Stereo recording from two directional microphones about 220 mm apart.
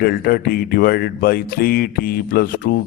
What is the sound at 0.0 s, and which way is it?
Speech, 45° left (ahead or behind).